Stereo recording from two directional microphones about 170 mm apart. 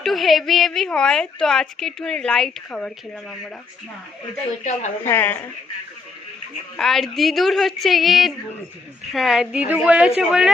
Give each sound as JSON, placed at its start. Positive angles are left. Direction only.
{"t": 0.0, "sound": "a woman's voice", "side_deg": 0}
{"t": 4.6, "sound": "speech", "side_deg": 45}
{"t": 5.0, "sound": "speech", "side_deg": 10}
{"t": 6.7, "sound": "a woman's voice", "side_deg": 0}